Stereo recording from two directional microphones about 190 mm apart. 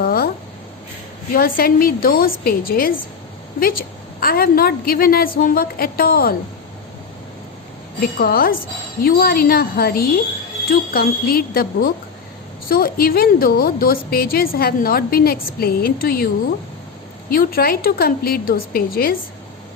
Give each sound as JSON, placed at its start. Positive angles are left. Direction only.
{"t": 0.0, "sound": "a sound", "side_deg": 50}
{"t": 1.3, "sound": "a woman's voice", "side_deg": 50}
{"t": 8.2, "sound": "a woman's voice", "side_deg": 50}